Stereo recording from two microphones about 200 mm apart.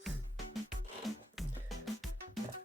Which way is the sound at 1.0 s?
Centre (ahead or behind).